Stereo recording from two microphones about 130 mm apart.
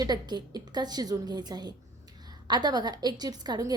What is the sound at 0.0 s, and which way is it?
A woman's voice, 35° right (ahead or behind).